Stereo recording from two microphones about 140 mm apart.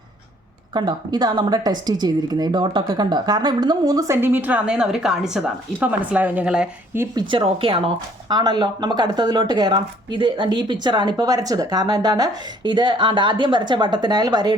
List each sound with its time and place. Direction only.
0.7 s speech: 35° right (ahead or behind); by 7.0 s 10° right (ahead or behind)
7.2 s speech: 35° right (ahead or behind)